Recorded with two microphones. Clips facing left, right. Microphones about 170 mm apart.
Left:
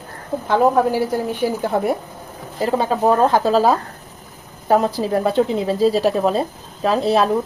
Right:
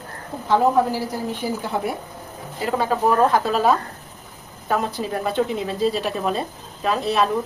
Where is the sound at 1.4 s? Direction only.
90° left.